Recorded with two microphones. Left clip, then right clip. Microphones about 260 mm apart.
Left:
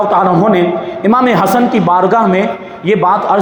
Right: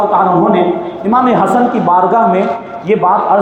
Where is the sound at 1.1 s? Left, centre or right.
Left.